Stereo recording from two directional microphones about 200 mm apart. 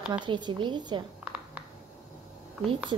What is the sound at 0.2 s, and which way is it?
Speech, 20° right (ahead or behind).